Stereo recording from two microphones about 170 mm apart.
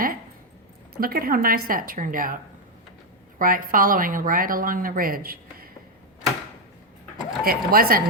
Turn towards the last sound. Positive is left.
turn(degrees=-60)  # may be behind; listen again after turning